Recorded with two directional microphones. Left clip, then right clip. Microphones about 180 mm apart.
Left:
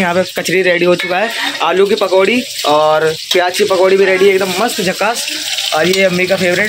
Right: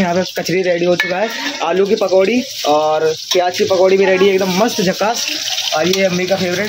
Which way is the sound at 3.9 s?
15° right (ahead or behind).